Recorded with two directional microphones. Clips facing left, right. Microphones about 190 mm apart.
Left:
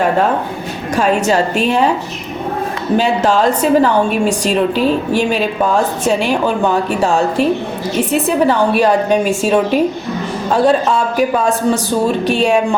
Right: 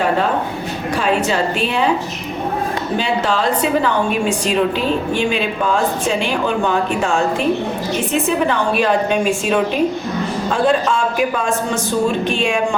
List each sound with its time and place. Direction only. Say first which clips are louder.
0.9 s a woman's voice: left 4 dB; 45° left (ahead or behind)
3.0 s a woman's voice: left 6 dB; 45° left (ahead or behind)
5.1 s a woman's voice: left 3 dB; 40° left (ahead or behind)
6.7 s a woman's voice: left 3 dB; 35° left (ahead or behind)